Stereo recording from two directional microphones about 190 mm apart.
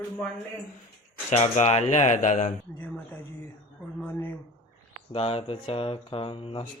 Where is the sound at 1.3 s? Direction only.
35° left (ahead or behind).